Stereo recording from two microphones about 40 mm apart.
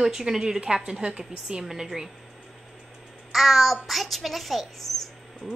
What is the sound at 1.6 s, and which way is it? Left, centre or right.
Speech, centre.